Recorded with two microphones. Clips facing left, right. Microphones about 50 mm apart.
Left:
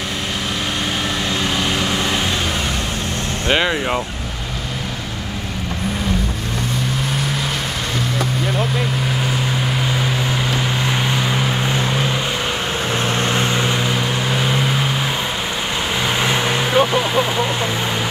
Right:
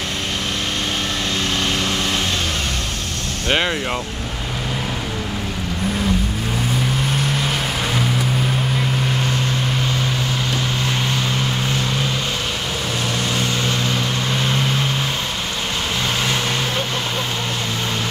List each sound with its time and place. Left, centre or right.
3.5 s speech: centre
11.1 s vehicle: centre
13.2 s vehicle: left; by 14.9 s centre
16.3 s vehicle: centre